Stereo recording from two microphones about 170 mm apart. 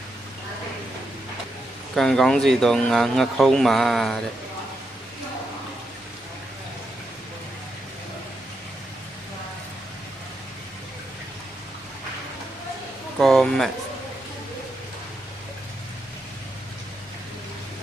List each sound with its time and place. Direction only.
2.0 s speech: 5° left (ahead or behind)
13.1 s speech: centre (ahead or behind)